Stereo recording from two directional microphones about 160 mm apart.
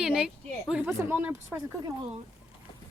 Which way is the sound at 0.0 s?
5° right (ahead or behind).